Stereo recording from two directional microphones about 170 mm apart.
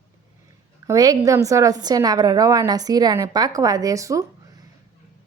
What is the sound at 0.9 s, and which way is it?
A woman's voice, 20° right (ahead or behind).